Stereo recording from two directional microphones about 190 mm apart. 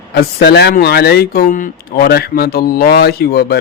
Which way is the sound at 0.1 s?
60° left (ahead or behind).